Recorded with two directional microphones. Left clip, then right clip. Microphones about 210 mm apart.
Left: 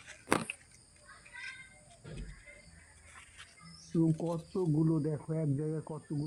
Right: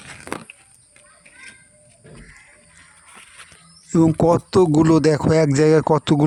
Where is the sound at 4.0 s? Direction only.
85° right.